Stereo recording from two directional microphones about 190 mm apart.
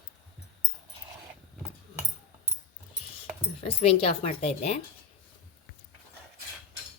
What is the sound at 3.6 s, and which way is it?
A woman's voice, 30° left (ahead or behind).